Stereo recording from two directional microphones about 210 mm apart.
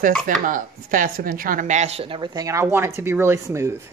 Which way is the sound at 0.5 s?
40° right (ahead or behind).